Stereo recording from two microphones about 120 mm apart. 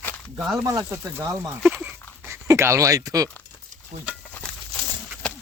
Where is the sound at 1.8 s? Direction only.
20° right (ahead or behind).